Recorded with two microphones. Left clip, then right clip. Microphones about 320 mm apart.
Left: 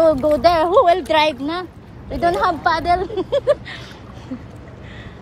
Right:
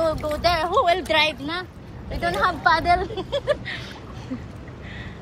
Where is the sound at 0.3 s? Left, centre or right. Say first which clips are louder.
Left 7 dB; left.